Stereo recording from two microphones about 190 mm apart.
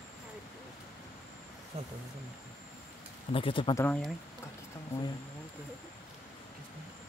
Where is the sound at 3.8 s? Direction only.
5° left (ahead or behind).